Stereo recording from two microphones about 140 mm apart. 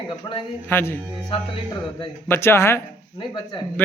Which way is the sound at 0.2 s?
35° left (ahead or behind).